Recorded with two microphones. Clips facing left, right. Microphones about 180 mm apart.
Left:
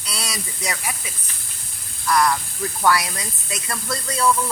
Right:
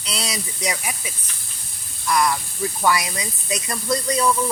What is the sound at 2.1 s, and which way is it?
Speech, 10° right (ahead or behind).